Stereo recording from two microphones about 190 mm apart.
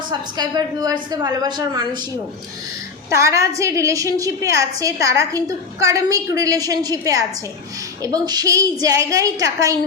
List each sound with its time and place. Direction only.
0.1 s a woman's voice: 20° right (ahead or behind)
3.1 s a woman's voice: 15° right (ahead or behind)